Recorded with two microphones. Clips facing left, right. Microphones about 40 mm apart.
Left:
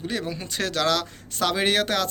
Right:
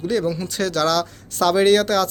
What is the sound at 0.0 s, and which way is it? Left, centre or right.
Speech, centre.